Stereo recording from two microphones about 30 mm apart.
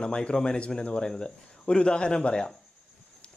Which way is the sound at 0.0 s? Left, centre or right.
Left.